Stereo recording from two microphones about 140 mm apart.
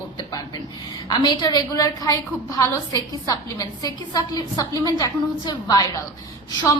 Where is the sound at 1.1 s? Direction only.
35° left (ahead or behind).